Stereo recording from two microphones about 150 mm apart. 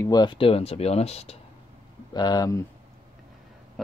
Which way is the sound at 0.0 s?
30° left (ahead or behind).